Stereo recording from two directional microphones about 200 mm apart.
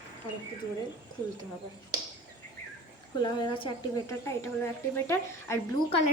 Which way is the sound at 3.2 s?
20° left (ahead or behind).